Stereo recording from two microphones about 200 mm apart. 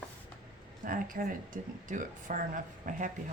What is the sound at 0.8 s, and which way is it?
Speech, 45° right (ahead or behind).